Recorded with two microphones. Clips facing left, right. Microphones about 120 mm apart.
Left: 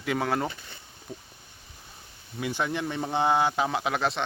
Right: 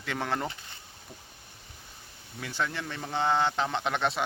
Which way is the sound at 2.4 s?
15° left (ahead or behind).